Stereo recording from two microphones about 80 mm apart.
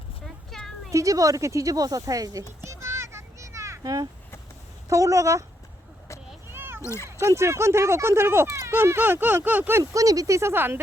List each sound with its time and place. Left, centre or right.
0.3 s a sound: centre
0.9 s speech: right
2.6 s children playing: right
4.9 s speech: right
6.5 s a sound: right
6.8 s speech: left
7.2 s speech: right
9.9 s speech: right